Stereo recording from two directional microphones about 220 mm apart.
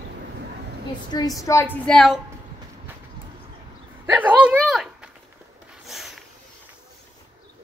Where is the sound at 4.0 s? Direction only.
10° right (ahead or behind).